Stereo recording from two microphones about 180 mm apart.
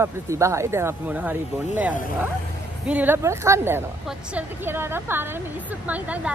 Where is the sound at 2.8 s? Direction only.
10° right (ahead or behind).